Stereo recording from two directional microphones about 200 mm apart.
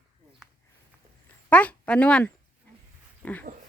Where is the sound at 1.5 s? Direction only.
5° left (ahead or behind).